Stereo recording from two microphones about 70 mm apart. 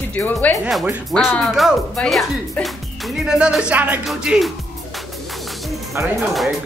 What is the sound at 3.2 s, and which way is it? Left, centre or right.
Music, centre.